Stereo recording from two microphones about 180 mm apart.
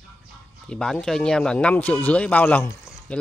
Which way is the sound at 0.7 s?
5° left (ahead or behind).